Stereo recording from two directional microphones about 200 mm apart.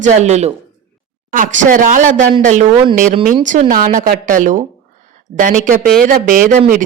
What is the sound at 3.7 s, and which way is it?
Speech, 40° right (ahead or behind).